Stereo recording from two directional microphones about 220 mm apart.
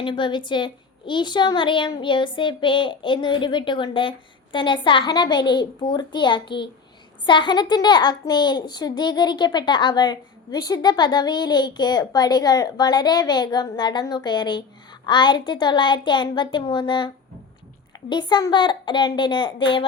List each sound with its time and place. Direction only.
0.0 s a child's voice: 20° left (ahead or behind)
18.1 s a child's voice: 20° left (ahead or behind)